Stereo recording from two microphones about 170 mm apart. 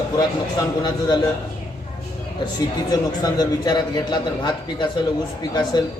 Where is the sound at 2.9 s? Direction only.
20° left (ahead or behind).